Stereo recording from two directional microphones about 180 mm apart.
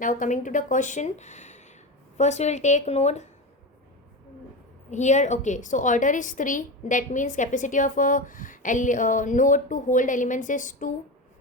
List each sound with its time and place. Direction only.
0.0 s a woman's voice: 45° left (ahead or behind)
4.9 s a woman's voice: 40° left (ahead or behind)